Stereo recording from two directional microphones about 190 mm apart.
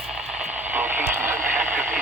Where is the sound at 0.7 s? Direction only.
10° right (ahead or behind).